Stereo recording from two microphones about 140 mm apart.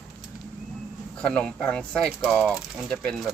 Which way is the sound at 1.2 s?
5° left (ahead or behind).